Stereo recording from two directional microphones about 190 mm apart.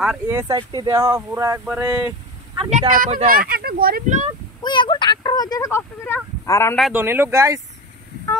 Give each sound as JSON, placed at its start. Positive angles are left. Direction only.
{"t": 0.0, "sound": "speech", "side_deg": -5}
{"t": 0.4, "sound": "speech", "side_deg": -20}
{"t": 2.9, "sound": "speech", "side_deg": -40}
{"t": 4.6, "sound": "speech", "side_deg": 25}
{"t": 6.8, "sound": "speech", "side_deg": -10}